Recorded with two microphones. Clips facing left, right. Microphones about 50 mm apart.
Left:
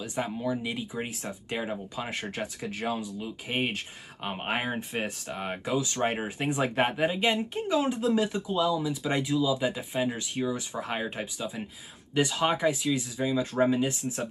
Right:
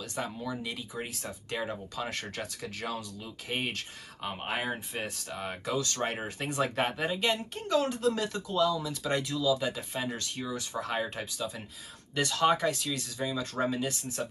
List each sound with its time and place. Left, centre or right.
0.0 s speech: centre